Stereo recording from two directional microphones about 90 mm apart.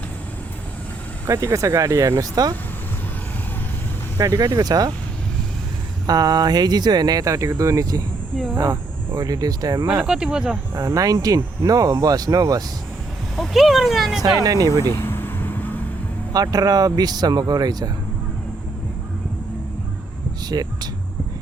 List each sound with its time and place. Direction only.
1.3 s speech: 35° right (ahead or behind)
4.2 s speech: 40° right (ahead or behind)
6.1 s speech: 50° right (ahead or behind)
10.0 s speech: 10° right (ahead or behind)
10.8 s speech: 40° right (ahead or behind)
13.3 s speech: centre (ahead or behind)
14.2 s speech: 45° right (ahead or behind)
14.8 s vehicle: 25° left (ahead or behind)
16.3 s speech: 45° right (ahead or behind)
20.5 s speech: 45° right (ahead or behind)